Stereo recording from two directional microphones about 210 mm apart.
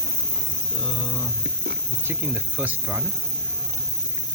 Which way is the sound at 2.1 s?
10° right (ahead or behind).